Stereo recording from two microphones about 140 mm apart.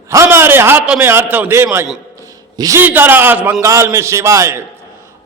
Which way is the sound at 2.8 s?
15° right (ahead or behind).